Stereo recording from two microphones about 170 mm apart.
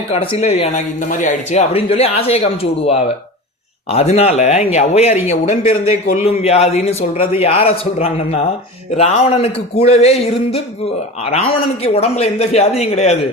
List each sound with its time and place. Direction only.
0.1 s a man's voice: 35° left (ahead or behind)